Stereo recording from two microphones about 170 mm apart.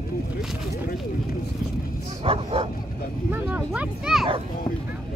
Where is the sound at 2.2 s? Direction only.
35° right (ahead or behind).